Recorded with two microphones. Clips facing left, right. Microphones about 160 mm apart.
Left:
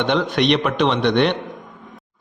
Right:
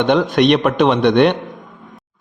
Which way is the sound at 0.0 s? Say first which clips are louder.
Right 5 dB; 50° right (ahead or behind).